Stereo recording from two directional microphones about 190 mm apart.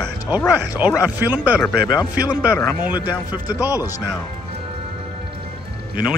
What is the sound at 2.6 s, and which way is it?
Speech, 15° left (ahead or behind).